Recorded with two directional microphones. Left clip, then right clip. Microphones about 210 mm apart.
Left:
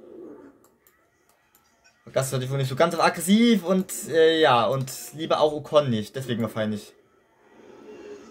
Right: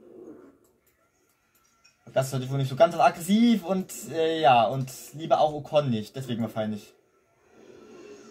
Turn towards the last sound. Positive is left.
turn(degrees=40)  # may be behind; listen again after turning